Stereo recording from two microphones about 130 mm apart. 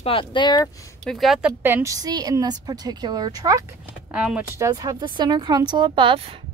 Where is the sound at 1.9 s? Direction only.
30° right (ahead or behind).